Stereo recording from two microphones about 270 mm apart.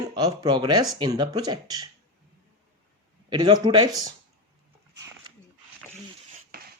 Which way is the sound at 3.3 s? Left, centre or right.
Centre.